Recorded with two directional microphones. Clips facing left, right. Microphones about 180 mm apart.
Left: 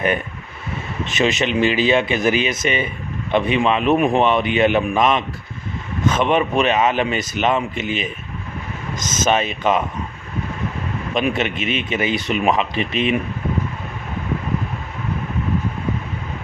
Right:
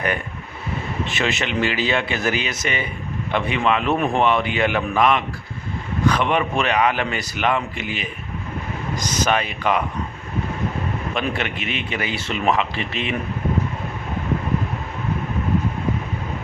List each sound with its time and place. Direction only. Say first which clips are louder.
1.0 s speech: left 6 dB; 20° left (ahead or behind)
11.1 s speech: left 7 dB; 20° left (ahead or behind)